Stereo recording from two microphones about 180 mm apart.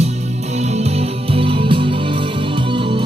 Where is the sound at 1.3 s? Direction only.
30° right (ahead or behind).